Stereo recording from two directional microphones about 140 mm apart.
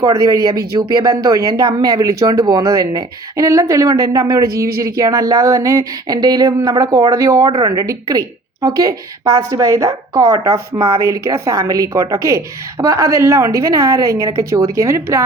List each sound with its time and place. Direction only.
0.0 s speech: 25° right (ahead or behind)